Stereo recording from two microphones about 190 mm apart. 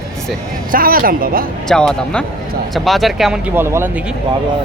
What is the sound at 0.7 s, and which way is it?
Speech, 50° right (ahead or behind).